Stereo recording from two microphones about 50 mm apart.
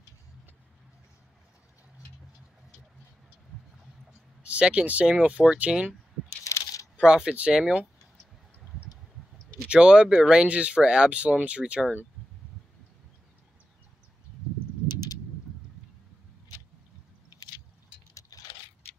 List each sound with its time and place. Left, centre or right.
4.4 s speech: right
6.4 s coin: left
7.0 s speech: centre
9.7 s speech: centre